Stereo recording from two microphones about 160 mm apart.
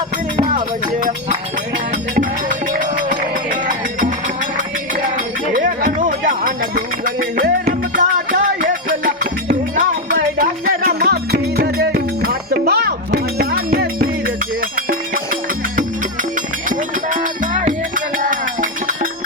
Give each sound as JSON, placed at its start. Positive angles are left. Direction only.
{"t": 0.3, "sound": "speech", "side_deg": -55}
{"t": 2.1, "sound": "music", "side_deg": -55}
{"t": 5.5, "sound": "music", "side_deg": -55}
{"t": 10.8, "sound": "music", "side_deg": -75}